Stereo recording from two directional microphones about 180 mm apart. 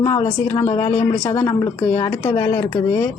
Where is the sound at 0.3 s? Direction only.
15° left (ahead or behind).